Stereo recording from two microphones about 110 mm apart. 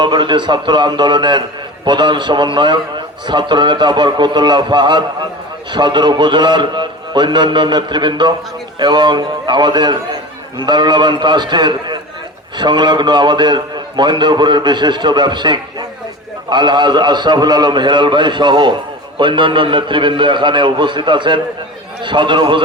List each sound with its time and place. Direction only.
0.0 s a man's voice: 45° right (ahead or behind)